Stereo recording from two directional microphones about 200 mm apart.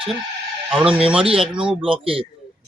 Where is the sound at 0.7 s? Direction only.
5° right (ahead or behind).